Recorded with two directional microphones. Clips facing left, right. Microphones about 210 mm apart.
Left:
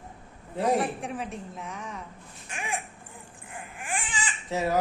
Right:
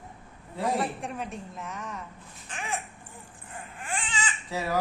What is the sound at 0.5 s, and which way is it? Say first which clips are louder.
Speech: left 4 dB; 20° left (ahead or behind).